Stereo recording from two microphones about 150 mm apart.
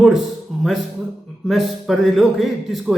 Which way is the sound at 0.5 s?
Centre (ahead or behind).